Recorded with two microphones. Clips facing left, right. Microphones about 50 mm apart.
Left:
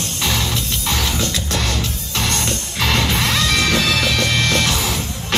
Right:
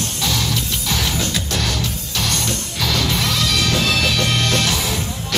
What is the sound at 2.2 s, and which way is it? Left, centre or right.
Music, left.